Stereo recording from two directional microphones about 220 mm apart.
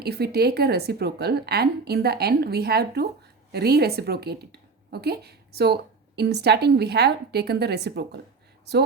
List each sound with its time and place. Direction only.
0.0 s a woman's voice: 45° right (ahead or behind)